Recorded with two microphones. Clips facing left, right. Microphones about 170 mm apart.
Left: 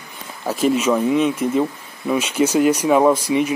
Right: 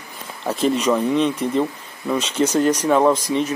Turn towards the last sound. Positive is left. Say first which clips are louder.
# left 2 dB
turn(degrees=10)  # may be behind; listen again after turning